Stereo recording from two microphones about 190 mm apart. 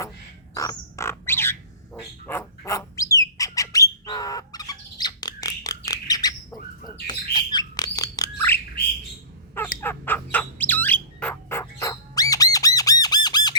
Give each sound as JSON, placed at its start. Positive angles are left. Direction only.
{"t": 0.5, "sound": "bird", "side_deg": 15}
{"t": 9.8, "sound": "bird", "side_deg": 10}